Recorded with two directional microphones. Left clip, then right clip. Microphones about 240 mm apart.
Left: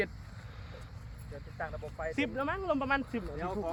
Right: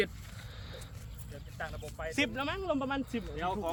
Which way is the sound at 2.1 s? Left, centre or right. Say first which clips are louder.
Right 1 dB; right.